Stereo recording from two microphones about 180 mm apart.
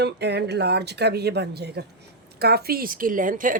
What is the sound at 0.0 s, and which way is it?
Speech, 70° right (ahead or behind).